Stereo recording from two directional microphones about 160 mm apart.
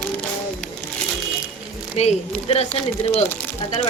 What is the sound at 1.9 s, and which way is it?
Speech, 40° left (ahead or behind).